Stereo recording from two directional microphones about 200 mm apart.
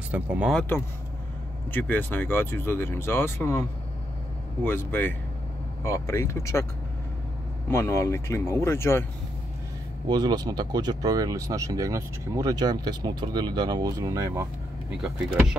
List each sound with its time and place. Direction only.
0.1 s speech: 5° right (ahead or behind)
1.7 s speech: 10° left (ahead or behind)
4.6 s speech: 10° left (ahead or behind)
7.7 s speech: 15° left (ahead or behind)
10.0 s speech: 20° right (ahead or behind)